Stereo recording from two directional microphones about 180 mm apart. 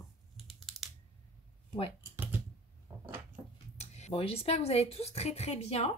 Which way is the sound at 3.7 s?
35° left (ahead or behind).